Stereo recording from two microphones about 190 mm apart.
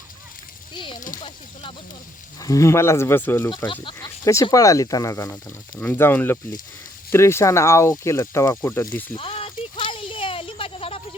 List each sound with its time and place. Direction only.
0.9 s speech: 45° left (ahead or behind)
2.4 s speech: 15° left (ahead or behind)
3.7 s speech: 25° left (ahead or behind)
9.1 s a sound: 30° left (ahead or behind)